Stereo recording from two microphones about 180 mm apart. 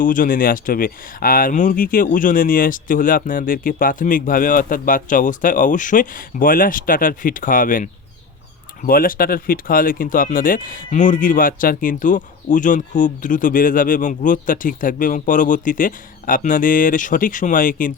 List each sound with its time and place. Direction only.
0.0 s speech: 50° left (ahead or behind)